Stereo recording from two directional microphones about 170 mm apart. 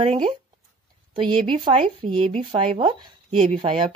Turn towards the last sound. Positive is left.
turn(degrees=-30)  # may be behind; listen again after turning